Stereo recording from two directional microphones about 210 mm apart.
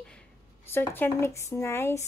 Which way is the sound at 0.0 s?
5° left (ahead or behind).